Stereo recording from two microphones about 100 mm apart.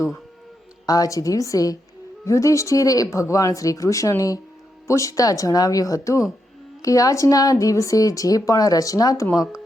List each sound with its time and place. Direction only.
0.9 s a woman's voice: 35° left (ahead or behind)